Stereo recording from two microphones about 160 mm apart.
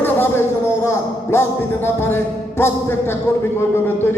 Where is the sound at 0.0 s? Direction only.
15° left (ahead or behind).